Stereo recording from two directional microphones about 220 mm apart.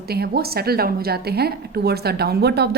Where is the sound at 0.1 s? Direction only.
45° right (ahead or behind).